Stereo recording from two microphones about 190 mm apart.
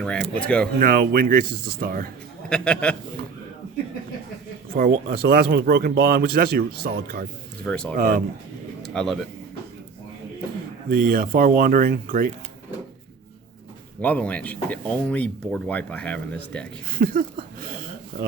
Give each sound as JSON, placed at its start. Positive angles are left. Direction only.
{"t": 0.0, "sound": "speech", "side_deg": 5}
{"t": 0.8, "sound": "speech", "side_deg": -50}
{"t": 2.5, "sound": "speech", "side_deg": 5}
{"t": 4.7, "sound": "speech", "side_deg": -50}
{"t": 7.6, "sound": "speech", "side_deg": 5}
{"t": 7.9, "sound": "speech", "side_deg": -45}
{"t": 8.8, "sound": "a sound", "side_deg": 5}
{"t": 10.8, "sound": "speech", "side_deg": -50}
{"t": 14.0, "sound": "speech", "side_deg": 5}
{"t": 16.9, "sound": "a sound", "side_deg": -50}